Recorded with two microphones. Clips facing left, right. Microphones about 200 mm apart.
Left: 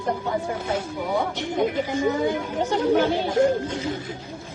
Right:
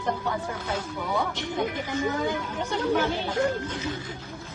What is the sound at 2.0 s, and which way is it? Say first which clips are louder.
Speech: left 4 dB; 20° left (ahead or behind).